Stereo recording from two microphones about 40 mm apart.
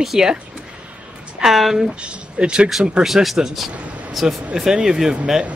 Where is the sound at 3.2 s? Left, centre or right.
Centre.